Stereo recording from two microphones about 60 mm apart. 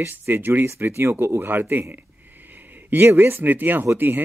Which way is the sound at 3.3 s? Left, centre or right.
Right.